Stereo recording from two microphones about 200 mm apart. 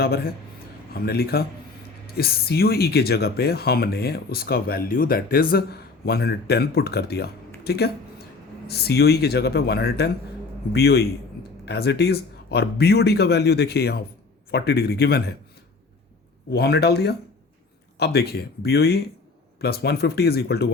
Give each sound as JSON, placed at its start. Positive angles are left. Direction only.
{"t": 0.0, "sound": "speech", "side_deg": 50}
{"t": 16.5, "sound": "speech", "side_deg": 55}